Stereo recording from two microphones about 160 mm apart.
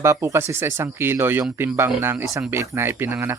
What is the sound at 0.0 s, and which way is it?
Speech, 20° right (ahead or behind).